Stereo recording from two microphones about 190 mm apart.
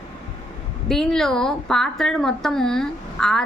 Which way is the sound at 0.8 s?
Centre (ahead or behind).